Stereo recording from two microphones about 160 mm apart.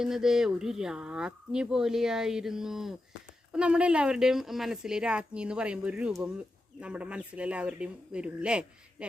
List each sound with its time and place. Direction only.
0.0 s speech: 5° right (ahead or behind)